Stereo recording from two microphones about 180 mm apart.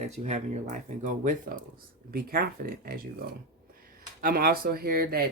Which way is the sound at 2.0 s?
55° right (ahead or behind).